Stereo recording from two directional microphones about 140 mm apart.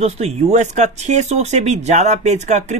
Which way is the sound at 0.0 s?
55° right (ahead or behind).